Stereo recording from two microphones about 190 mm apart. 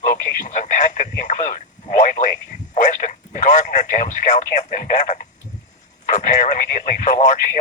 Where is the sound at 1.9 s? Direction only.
40° left (ahead or behind).